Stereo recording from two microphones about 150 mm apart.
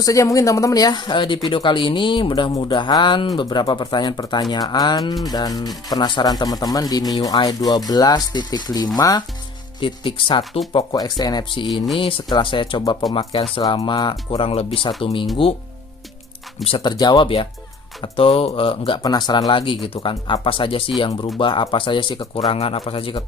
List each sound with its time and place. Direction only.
0.0 s speech: 20° left (ahead or behind)
16.6 s speech: 30° left (ahead or behind)